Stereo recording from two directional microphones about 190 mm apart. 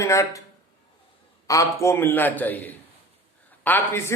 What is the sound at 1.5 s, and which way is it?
Speech, 15° left (ahead or behind).